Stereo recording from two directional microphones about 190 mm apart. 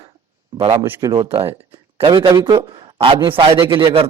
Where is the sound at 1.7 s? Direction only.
15° right (ahead or behind).